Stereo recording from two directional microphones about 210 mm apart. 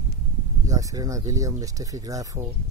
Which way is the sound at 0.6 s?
15° right (ahead or behind).